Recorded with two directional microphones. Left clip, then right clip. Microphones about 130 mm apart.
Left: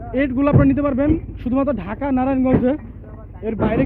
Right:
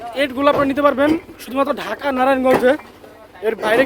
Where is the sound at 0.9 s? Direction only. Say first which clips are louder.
Right 4 dB; 60° right (ahead or behind).